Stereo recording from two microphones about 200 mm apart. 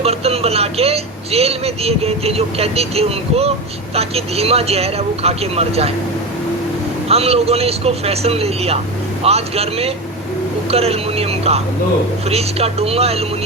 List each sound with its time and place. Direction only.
0.0 s speech: 30° right (ahead or behind)
7.1 s speech: 30° right (ahead or behind)